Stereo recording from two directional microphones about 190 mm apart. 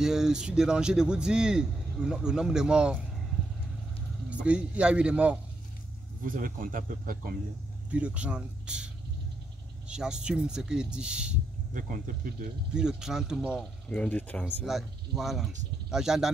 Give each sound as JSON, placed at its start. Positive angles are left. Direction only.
{"t": 0.0, "sound": "speech", "side_deg": -5}
{"t": 4.3, "sound": "speech", "side_deg": -5}
{"t": 6.2, "sound": "speech", "side_deg": -45}
{"t": 7.9, "sound": "speech", "side_deg": -5}
{"t": 11.7, "sound": "speech", "side_deg": -45}
{"t": 12.7, "sound": "speech", "side_deg": -5}
{"t": 13.8, "sound": "speech", "side_deg": 5}